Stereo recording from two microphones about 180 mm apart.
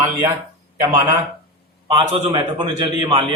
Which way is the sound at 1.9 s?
30° right (ahead or behind).